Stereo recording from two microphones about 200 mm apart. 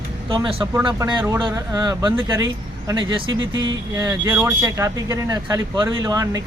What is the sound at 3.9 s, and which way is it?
Speech, 15° right (ahead or behind).